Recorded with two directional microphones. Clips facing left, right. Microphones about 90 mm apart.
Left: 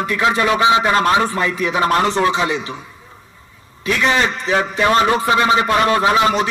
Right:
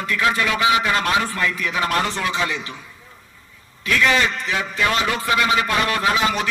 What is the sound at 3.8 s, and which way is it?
A man's voice, 25° left (ahead or behind).